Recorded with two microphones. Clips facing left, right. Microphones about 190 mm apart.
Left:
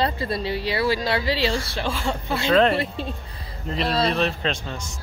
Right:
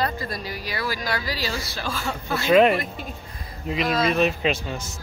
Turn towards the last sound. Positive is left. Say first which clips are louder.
# right 3 dB
turn(degrees=-5)  # may be behind; listen again after turning